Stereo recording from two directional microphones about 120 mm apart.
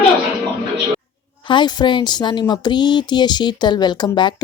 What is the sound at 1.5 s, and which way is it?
Speech, 40° left (ahead or behind).